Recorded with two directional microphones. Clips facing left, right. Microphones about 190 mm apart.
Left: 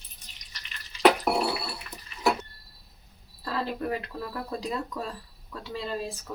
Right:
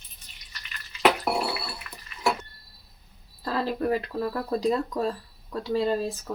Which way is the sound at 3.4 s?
35° right (ahead or behind).